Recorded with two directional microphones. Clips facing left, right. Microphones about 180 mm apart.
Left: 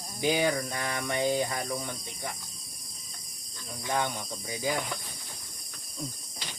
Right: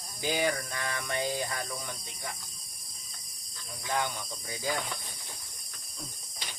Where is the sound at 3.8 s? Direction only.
20° left (ahead or behind).